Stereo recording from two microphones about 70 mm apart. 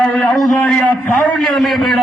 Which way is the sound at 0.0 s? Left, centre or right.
Centre.